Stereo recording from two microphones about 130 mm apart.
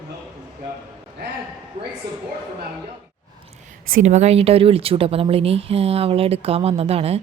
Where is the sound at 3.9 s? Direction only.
65° right (ahead or behind).